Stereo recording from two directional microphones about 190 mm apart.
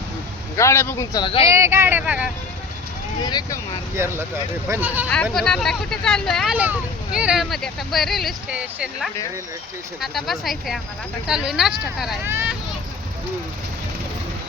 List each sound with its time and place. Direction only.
0.5 s a man's voice: 15° left (ahead or behind)
1.5 s speech: 15° right (ahead or behind)
3.2 s speech: 20° left (ahead or behind)
3.9 s speech: 15° right (ahead or behind)
5.0 s speech: 5° left (ahead or behind)
12.2 s speech: 15° right (ahead or behind)